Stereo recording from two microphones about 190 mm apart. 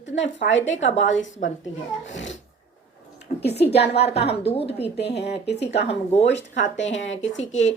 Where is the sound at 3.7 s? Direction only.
60° left (ahead or behind).